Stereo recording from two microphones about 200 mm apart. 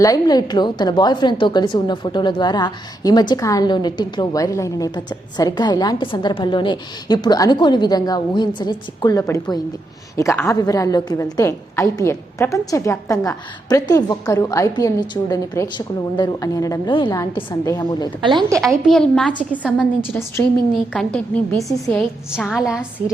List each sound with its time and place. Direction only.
0.0 s a woman's voice: 20° left (ahead or behind)
18.2 s a woman's voice: 20° right (ahead or behind)
18.9 s a woman's voice: 5° left (ahead or behind)
20.9 s a woman's voice: 5° left (ahead or behind)